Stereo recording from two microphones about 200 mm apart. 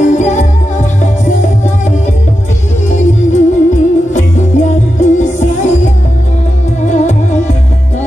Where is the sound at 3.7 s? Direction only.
35° left (ahead or behind).